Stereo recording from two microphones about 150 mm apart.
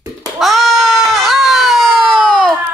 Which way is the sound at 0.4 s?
Centre (ahead or behind).